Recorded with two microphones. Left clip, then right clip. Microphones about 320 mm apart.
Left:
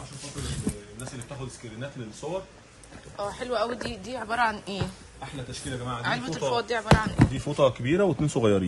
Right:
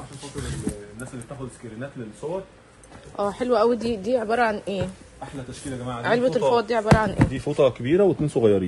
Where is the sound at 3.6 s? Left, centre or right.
Centre.